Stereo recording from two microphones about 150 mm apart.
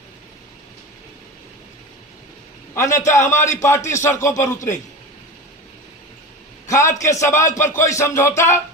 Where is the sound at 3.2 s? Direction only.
55° left (ahead or behind).